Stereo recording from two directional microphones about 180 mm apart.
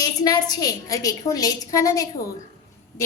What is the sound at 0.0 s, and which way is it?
A woman's voice, 20° left (ahead or behind).